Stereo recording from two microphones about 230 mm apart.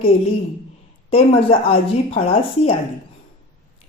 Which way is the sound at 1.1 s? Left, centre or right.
Left.